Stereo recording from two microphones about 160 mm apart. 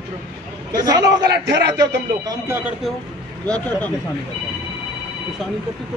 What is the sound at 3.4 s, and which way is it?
Speech, 5° left (ahead or behind).